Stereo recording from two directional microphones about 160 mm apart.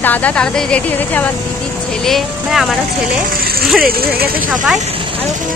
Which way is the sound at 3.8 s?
70° right (ahead or behind).